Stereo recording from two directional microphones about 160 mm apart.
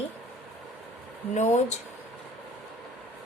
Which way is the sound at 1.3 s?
45° left (ahead or behind).